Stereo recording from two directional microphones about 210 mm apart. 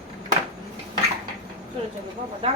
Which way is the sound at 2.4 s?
30° right (ahead or behind).